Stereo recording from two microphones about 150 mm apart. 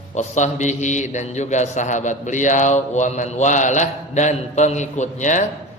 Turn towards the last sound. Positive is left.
turn(degrees=55)  # may be behind; listen again after turning